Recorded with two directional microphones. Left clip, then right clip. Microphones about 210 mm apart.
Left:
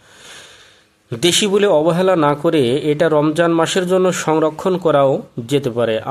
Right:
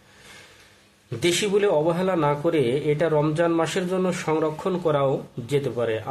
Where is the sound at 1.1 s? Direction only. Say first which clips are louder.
Left 7 dB; 40° left (ahead or behind).